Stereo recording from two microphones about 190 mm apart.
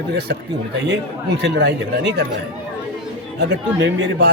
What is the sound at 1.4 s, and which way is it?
Speech, 65° right (ahead or behind).